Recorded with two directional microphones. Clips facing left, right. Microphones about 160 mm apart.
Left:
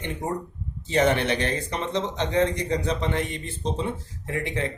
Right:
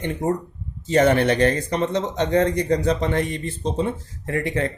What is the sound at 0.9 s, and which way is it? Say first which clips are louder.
Speech: right 5 dB; 45° right (ahead or behind).